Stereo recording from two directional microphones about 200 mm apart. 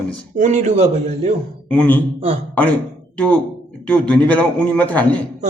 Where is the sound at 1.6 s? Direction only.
5° left (ahead or behind).